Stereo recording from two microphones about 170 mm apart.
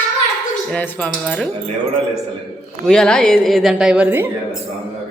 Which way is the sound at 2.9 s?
5° left (ahead or behind).